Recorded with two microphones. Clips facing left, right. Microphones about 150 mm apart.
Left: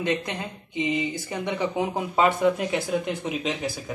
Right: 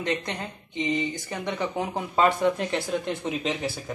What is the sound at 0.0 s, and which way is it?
Speech, 10° left (ahead or behind).